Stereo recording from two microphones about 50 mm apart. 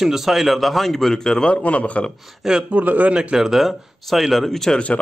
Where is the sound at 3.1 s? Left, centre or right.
Centre.